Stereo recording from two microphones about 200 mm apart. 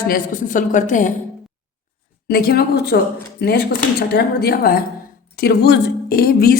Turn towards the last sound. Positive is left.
turn(degrees=50)  # may be behind; listen again after turning